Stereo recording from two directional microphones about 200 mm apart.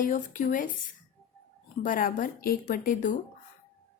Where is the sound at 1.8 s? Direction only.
45° left (ahead or behind).